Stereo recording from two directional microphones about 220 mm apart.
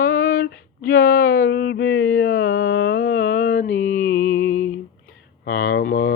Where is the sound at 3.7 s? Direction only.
10° left (ahead or behind).